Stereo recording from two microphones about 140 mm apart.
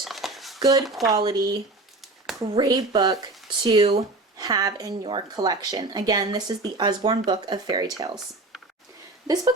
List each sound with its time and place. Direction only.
0.0 s a sound: centre (ahead or behind)
0.6 s a woman's voice: 25° right (ahead or behind)
2.6 s a woman's voice: 30° right (ahead or behind)
4.4 s a woman's voice: 30° right (ahead or behind)
9.2 s speech: 25° right (ahead or behind)